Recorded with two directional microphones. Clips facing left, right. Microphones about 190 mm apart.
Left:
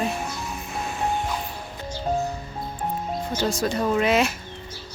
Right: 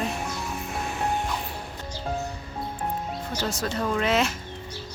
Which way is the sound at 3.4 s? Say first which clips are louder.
Left 4 dB; 15° left (ahead or behind).